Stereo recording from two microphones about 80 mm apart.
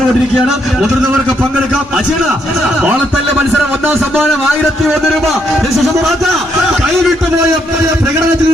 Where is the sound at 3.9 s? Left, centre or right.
Centre.